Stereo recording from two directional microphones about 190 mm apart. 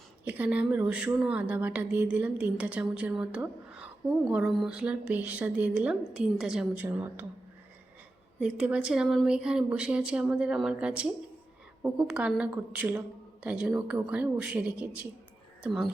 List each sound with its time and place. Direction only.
0.3 s a woman's voice: 10° right (ahead or behind)
8.4 s a woman's voice: 5° right (ahead or behind)